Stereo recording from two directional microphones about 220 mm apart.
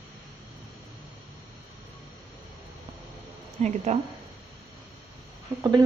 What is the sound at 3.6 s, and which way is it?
Speech, 30° right (ahead or behind).